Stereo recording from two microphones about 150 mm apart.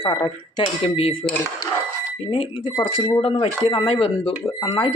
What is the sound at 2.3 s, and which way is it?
Speech, 35° left (ahead or behind).